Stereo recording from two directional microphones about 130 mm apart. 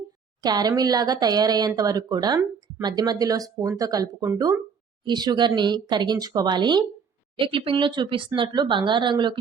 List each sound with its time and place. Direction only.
0.4 s speech: 30° right (ahead or behind)
5.0 s speech: 35° right (ahead or behind)